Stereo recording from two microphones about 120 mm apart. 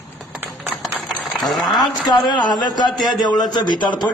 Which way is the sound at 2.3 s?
35° left (ahead or behind).